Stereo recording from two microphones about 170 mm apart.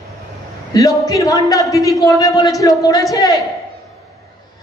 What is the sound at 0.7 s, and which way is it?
A man's voice, 20° left (ahead or behind).